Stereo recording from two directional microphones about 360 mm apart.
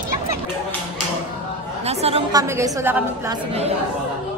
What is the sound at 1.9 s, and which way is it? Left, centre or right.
A woman's voice, centre.